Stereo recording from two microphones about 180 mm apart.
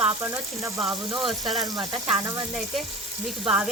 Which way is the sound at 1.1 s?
25° right (ahead or behind).